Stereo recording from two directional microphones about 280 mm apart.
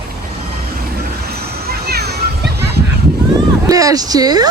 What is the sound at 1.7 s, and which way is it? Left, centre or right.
Music, right.